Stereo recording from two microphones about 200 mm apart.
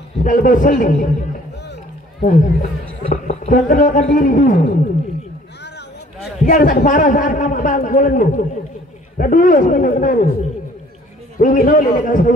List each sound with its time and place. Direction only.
0.2 s a man's voice: 40° left (ahead or behind)
2.2 s a man's voice: 40° left (ahead or behind)
6.4 s a man's voice: 40° left (ahead or behind)